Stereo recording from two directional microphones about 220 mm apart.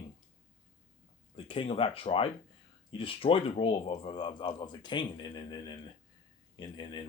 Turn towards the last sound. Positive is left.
turn(degrees=20)  # may be behind; listen again after turning